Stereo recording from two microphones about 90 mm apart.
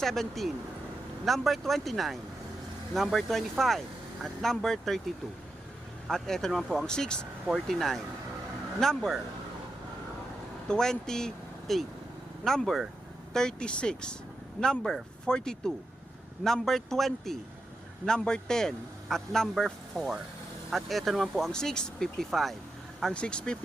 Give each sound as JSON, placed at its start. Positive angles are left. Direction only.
{"t": 0.0, "sound": "a man's voice", "side_deg": 5}
{"t": 6.1, "sound": "a man's voice", "side_deg": 5}
{"t": 10.7, "sound": "a man's voice", "side_deg": 5}